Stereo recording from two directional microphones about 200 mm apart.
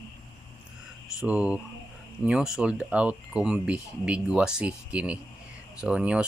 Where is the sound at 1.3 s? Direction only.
5° right (ahead or behind).